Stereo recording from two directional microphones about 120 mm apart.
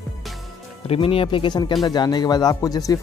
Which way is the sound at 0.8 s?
50° left (ahead or behind).